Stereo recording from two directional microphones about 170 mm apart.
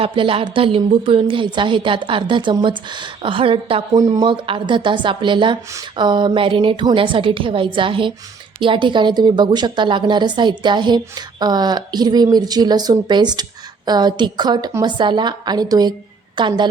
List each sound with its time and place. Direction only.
0.0 s a woman's voice: 30° right (ahead or behind)
3.9 s a woman's voice: 20° right (ahead or behind)